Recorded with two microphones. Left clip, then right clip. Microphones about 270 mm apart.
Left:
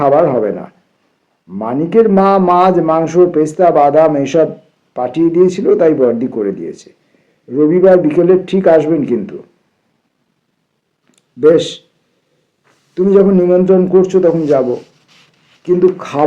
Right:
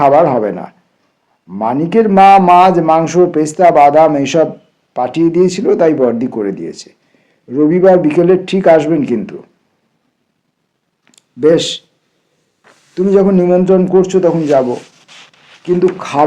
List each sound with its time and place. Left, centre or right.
0.0 s a man's voice: right
11.1 s a man's voice: right